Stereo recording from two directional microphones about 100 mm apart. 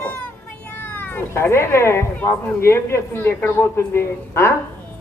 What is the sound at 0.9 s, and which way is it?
A man's voice, 20° left (ahead or behind).